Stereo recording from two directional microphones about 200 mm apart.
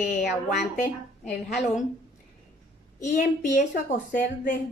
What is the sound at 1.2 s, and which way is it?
Speech, centre (ahead or behind).